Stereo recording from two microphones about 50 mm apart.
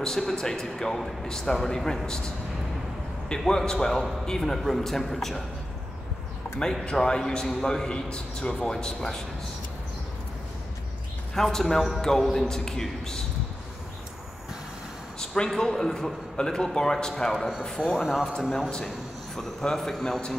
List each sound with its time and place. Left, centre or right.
0.0 s a man's voice: centre
3.3 s a man's voice: centre
6.6 s a man's voice: centre
11.3 s a man's voice: centre
15.1 s a man's voice: centre
17.9 s a man's voice: centre
19.3 s a man's voice: centre